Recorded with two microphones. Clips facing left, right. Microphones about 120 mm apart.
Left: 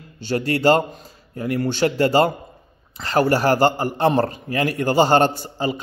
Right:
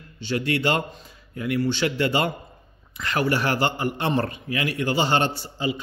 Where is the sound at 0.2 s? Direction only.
40° left (ahead or behind).